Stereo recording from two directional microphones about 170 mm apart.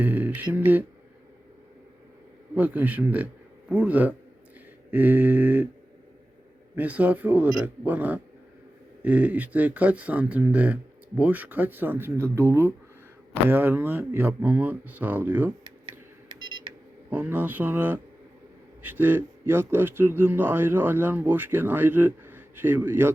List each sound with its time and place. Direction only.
0.0 s a man's voice: 10° right (ahead or behind)
2.6 s a man's voice: 10° right (ahead or behind)
6.7 s a man's voice: 10° right (ahead or behind)
16.3 s pulse: 25° right (ahead or behind)
17.1 s a man's voice: 10° right (ahead or behind)